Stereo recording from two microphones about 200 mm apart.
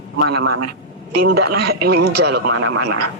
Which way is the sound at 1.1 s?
50° right (ahead or behind).